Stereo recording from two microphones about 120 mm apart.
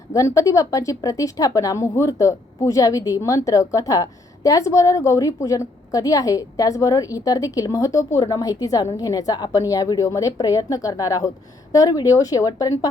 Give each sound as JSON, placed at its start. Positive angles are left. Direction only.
{"t": 0.1, "sound": "speech", "side_deg": 25}